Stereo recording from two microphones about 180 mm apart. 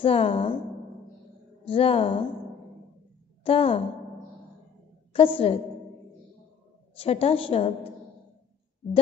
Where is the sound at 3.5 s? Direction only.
30° left (ahead or behind).